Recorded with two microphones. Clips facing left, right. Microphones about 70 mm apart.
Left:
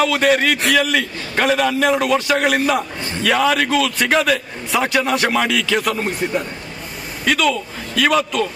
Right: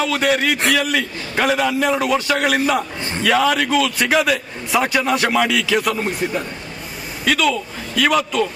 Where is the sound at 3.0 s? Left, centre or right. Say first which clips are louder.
Even; right.